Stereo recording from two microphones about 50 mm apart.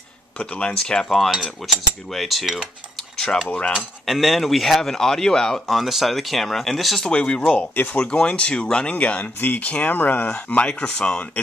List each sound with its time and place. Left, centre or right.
0.4 s cutlery: left; by 2.5 s centre
3.2 s speech: centre
4.0 s cutlery: centre
5.7 s cutlery: centre
7.1 s speech: left
8.9 s speech: left
10.2 s speech: left